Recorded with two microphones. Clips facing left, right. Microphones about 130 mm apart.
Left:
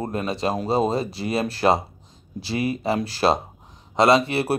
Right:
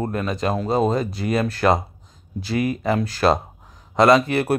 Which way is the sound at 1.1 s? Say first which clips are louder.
Right 3 dB; 50° right (ahead or behind).